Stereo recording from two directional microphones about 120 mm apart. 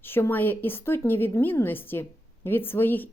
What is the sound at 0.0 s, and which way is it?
A woman's voice, 20° left (ahead or behind).